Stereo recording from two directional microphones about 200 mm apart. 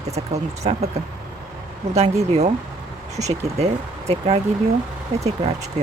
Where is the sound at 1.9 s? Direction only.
30° right (ahead or behind).